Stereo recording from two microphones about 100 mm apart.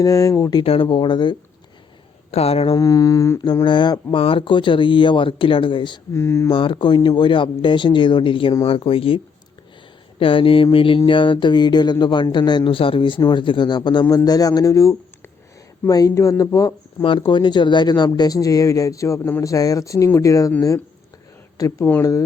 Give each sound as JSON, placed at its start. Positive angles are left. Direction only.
{"t": 0.0, "sound": "speech", "side_deg": 35}
{"t": 0.6, "sound": "speech", "side_deg": 65}
{"t": 2.3, "sound": "speech", "side_deg": 85}
{"t": 2.7, "sound": "speech", "side_deg": 35}
{"t": 3.4, "sound": "speech", "side_deg": 50}
{"t": 4.1, "sound": "speech", "side_deg": 65}
{"t": 6.1, "sound": "speech", "side_deg": 25}
{"t": 6.5, "sound": "speech", "side_deg": 60}
{"t": 17.0, "sound": "speech", "side_deg": 60}